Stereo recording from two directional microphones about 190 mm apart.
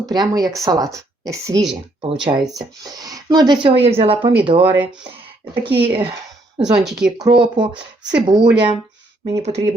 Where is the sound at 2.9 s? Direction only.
20° right (ahead or behind); by 4.7 s 40° right (ahead or behind).